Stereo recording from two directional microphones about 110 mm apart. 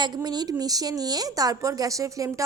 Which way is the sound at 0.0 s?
40° right (ahead or behind).